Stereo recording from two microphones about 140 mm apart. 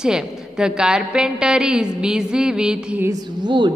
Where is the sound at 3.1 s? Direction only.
30° right (ahead or behind).